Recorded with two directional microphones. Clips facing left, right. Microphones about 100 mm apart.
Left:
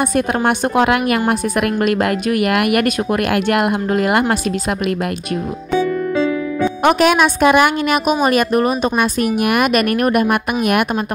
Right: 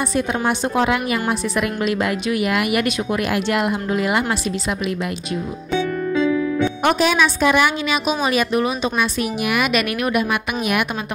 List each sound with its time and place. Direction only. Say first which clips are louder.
0.0 s a woman's voice: left 4 dB; 55° left (ahead or behind)
6.8 s a woman's voice: left 6 dB; 75° left (ahead or behind); by 10.9 s 50° left (ahead or behind)